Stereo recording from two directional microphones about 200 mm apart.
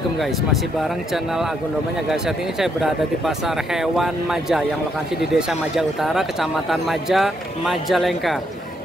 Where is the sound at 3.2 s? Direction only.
Centre (ahead or behind).